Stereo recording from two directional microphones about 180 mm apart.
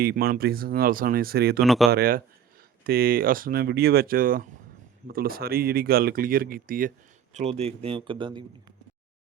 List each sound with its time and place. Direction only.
0.0 s speech: 60° right (ahead or behind)
1.6 s speech: centre (ahead or behind)
1.9 s speech: 55° right (ahead or behind)
7.3 s speech: 35° right (ahead or behind)